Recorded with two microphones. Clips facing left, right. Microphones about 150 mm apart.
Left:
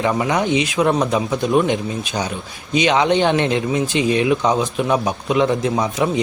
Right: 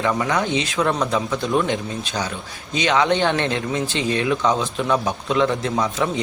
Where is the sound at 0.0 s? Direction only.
15° left (ahead or behind).